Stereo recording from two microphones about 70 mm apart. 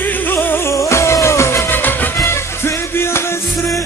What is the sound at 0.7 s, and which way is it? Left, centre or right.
Music, left.